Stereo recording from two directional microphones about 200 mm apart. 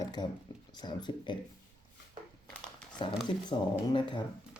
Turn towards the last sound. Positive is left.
turn(degrees=25)  # may be behind; listen again after turning